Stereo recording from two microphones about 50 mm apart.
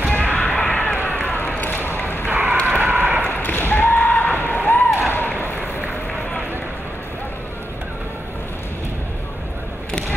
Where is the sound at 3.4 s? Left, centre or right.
Left.